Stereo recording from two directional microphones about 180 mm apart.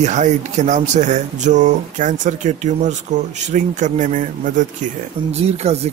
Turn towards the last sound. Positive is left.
turn(degrees=-35)  # may be behind; listen again after turning